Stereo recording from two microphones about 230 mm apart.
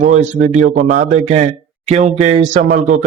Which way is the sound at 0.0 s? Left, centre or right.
Right.